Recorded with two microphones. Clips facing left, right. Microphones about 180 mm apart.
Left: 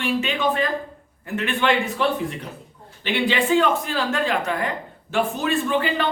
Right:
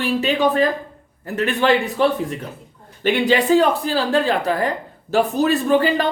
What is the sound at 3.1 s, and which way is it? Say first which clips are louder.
Speech: right 5 dB; 45° right (ahead or behind).